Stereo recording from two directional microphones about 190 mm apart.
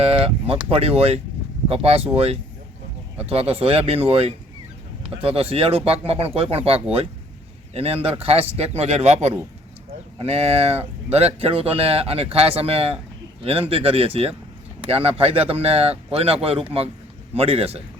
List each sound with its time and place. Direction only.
0.0 s speech: 30° right (ahead or behind)